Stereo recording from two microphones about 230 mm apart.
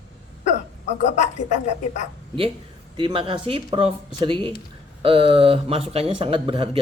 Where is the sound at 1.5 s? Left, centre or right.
Left.